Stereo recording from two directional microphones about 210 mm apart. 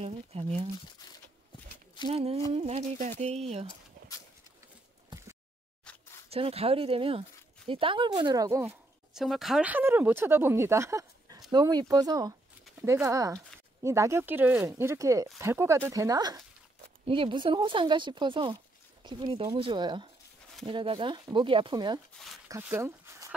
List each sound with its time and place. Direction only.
0.0 s speech: 30° right (ahead or behind)
2.0 s speech: 30° right (ahead or behind)
5.9 s camera: 5° left (ahead or behind)
6.2 s speech: 30° right (ahead or behind)
9.1 s speech: centre (ahead or behind); by 22.0 s 20° right (ahead or behind)
22.5 s a sound: 10° right (ahead or behind)